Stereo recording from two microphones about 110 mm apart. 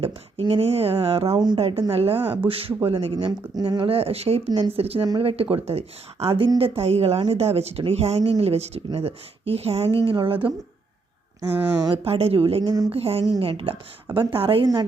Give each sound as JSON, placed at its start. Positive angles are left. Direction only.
{"t": 0.0, "sound": "speech", "side_deg": -55}
{"t": 1.3, "sound": "speech", "side_deg": -40}
{"t": 1.5, "sound": "speech", "side_deg": -65}
{"t": 10.0, "sound": "speech", "side_deg": -45}
{"t": 12.0, "sound": "speech", "side_deg": -60}
{"t": 12.6, "sound": "speech", "side_deg": -35}
{"t": 12.9, "sound": "speech", "side_deg": -60}
{"t": 14.6, "sound": "speech", "side_deg": -40}